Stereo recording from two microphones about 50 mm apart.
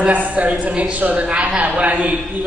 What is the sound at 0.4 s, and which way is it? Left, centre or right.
A man's voice, right.